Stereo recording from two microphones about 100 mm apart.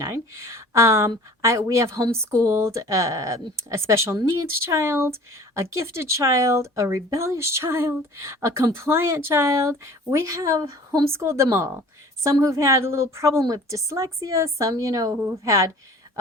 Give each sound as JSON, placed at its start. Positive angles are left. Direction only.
{"t": 0.0, "sound": "a woman's voice", "side_deg": -30}